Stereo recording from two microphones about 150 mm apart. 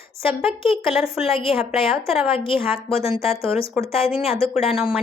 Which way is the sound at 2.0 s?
5° right (ahead or behind).